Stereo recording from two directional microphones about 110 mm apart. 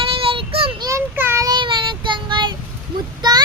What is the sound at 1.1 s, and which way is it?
Child singing, 20° right (ahead or behind).